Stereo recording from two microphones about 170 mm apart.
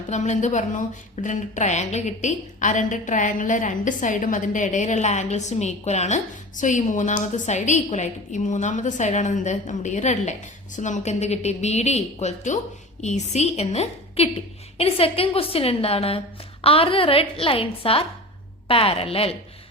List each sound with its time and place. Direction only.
0.1 s a woman's voice: 45° left (ahead or behind)